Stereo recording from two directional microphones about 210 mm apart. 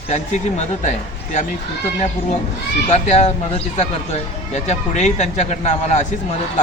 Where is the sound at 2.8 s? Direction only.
30° left (ahead or behind).